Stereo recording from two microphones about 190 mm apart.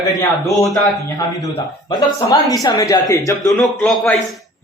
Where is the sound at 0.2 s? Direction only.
15° left (ahead or behind).